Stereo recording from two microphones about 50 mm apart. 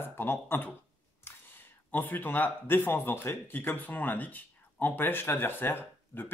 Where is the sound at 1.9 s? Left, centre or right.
Left.